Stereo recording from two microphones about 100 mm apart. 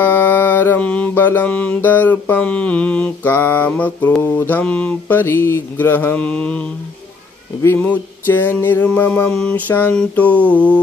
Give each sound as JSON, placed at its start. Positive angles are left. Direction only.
{"t": 0.0, "sound": "mantra", "side_deg": 20}
{"t": 7.6, "sound": "music", "side_deg": 20}
{"t": 9.7, "sound": "mantra", "side_deg": 20}